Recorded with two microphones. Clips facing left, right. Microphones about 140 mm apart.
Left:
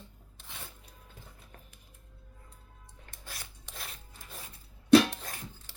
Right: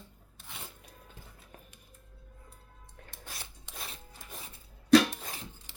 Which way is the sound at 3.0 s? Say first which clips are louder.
Right 4 dB; 60° right (ahead or behind).